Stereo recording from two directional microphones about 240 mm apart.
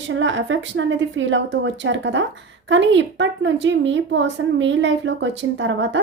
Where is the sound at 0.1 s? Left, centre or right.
Right.